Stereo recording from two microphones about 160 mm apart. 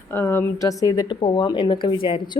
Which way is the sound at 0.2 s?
15° left (ahead or behind).